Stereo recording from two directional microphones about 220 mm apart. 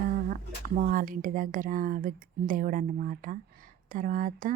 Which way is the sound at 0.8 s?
40° right (ahead or behind).